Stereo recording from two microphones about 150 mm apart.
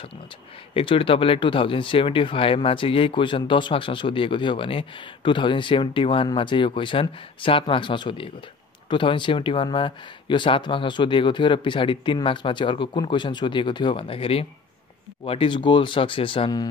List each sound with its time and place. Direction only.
0.7 s speech: 35° left (ahead or behind)